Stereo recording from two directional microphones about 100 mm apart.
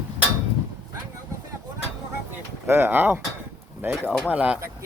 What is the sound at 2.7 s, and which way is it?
Speech, 20° right (ahead or behind).